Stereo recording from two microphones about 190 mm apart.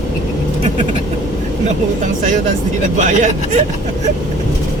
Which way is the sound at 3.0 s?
40° right (ahead or behind).